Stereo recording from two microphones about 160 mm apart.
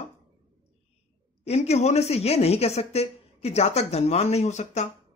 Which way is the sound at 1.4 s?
40° left (ahead or behind).